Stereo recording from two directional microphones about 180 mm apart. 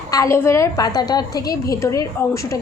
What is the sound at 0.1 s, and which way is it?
A woman's voice, 15° left (ahead or behind).